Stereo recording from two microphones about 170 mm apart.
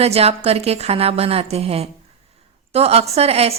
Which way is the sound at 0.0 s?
35° right (ahead or behind).